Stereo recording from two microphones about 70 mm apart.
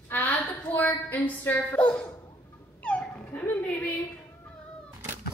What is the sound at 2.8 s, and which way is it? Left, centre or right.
Dog, centre.